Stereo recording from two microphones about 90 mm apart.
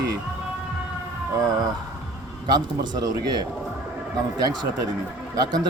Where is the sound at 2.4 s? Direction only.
50° right (ahead or behind).